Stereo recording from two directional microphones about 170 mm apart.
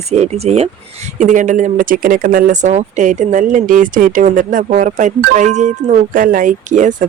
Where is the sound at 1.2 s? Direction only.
50° right (ahead or behind).